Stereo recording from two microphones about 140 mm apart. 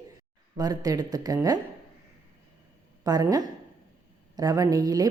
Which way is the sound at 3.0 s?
25° right (ahead or behind).